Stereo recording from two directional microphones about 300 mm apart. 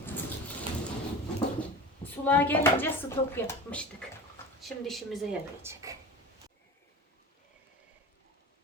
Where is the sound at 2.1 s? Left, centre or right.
Centre.